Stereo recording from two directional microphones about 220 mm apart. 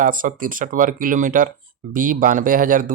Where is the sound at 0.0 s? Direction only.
40° right (ahead or behind).